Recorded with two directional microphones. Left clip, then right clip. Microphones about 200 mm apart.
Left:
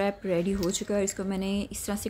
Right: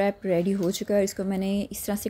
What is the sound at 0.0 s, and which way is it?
Speech, 15° right (ahead or behind).